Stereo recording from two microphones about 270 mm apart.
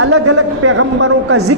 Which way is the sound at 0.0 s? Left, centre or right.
Right.